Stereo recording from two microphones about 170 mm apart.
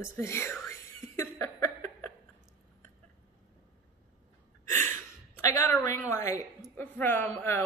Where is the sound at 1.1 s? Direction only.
15° left (ahead or behind).